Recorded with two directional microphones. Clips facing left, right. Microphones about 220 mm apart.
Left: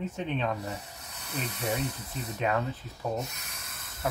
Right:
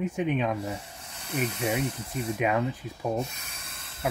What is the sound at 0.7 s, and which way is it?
Snake, 30° right (ahead or behind).